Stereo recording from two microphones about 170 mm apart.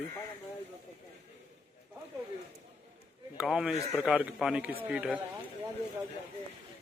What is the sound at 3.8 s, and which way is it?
Speech, 20° left (ahead or behind).